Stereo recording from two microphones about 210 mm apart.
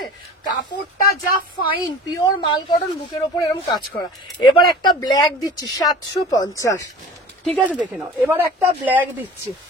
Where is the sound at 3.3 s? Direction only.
15° left (ahead or behind).